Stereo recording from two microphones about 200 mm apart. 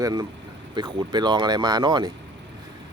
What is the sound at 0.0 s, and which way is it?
Speech, 20° right (ahead or behind).